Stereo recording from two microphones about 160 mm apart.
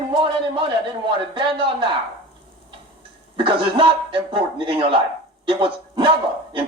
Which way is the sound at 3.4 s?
35° right (ahead or behind).